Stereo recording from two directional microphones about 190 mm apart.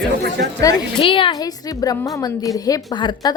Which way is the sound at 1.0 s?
25° left (ahead or behind).